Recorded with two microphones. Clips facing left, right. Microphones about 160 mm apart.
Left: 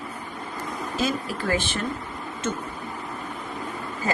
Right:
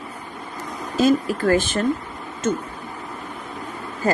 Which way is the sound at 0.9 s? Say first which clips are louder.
Right 10 dB; 50° right (ahead or behind).